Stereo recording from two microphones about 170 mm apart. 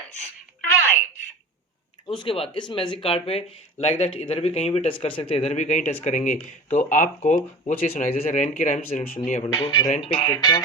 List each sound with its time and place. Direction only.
0.6 s telephone: 15° left (ahead or behind)
2.0 s speech: 30° left (ahead or behind); by 9.1 s 50° left (ahead or behind)
9.4 s speech: 25° left (ahead or behind)